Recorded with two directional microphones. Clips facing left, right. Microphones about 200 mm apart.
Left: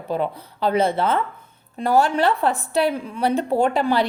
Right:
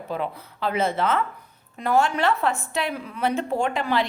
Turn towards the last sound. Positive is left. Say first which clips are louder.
# left 5 dB
turn(degrees=35)  # may be behind; listen again after turning